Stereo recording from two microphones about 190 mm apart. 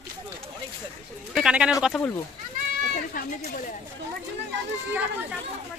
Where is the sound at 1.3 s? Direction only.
5° right (ahead or behind).